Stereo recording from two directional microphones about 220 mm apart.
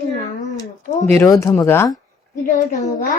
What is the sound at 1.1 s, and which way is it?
Speech, 15° left (ahead or behind).